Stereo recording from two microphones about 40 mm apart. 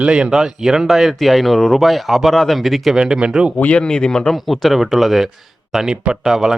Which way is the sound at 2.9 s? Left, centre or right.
Centre.